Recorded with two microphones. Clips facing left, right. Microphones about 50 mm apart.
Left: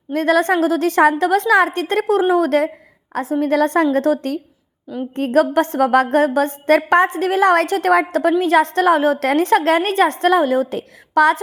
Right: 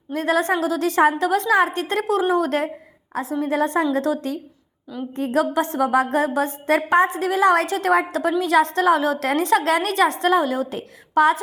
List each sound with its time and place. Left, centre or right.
0.1 s a woman's voice: left
3.4 s a woman's voice: left
3.9 s a woman's voice: left